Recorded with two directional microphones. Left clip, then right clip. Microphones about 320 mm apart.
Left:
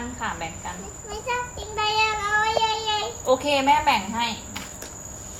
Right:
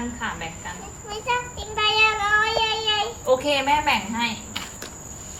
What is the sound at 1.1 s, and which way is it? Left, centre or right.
Child singing, centre.